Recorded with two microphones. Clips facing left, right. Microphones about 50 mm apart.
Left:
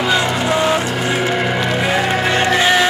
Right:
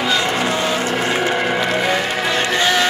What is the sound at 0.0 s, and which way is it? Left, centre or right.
Vehicle, centre.